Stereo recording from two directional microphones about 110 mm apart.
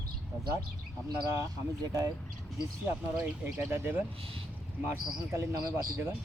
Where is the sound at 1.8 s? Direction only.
35° right (ahead or behind).